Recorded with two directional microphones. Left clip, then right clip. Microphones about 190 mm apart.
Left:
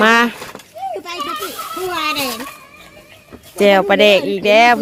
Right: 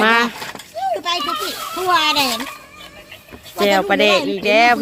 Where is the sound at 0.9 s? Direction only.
50° right (ahead or behind).